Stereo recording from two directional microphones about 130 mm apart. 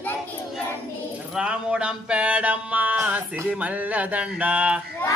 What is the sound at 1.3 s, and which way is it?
Music, 10° right (ahead or behind).